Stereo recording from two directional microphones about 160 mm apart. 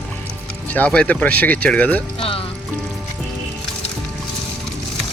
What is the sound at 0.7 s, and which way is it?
Speech, 10° left (ahead or behind).